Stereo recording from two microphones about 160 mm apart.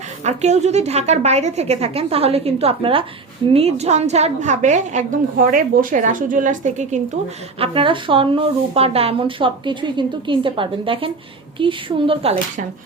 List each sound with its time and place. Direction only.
0.3 s a woman's voice: 45° right (ahead or behind)
7.6 s a woman's voice: 35° right (ahead or behind)